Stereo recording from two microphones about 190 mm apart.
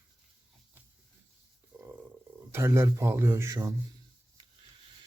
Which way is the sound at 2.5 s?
15° right (ahead or behind).